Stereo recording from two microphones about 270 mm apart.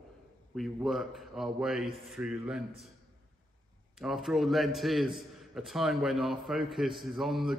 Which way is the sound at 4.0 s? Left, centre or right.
Centre.